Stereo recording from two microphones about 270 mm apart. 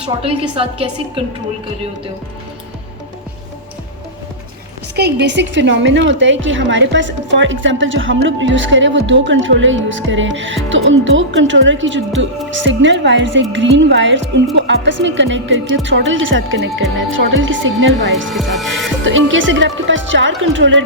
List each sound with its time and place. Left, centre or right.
0.2 s a woman's voice: right
4.9 s a woman's voice: right
18.3 s speech: centre
19.0 s a woman's voice: right